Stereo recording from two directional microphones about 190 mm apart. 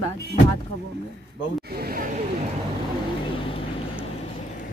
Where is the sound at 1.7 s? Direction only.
50° right (ahead or behind).